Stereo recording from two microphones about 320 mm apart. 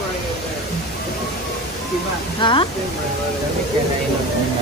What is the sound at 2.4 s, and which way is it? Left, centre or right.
Speech, centre.